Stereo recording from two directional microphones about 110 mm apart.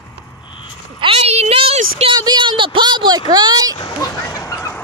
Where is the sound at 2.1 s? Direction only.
40° right (ahead or behind).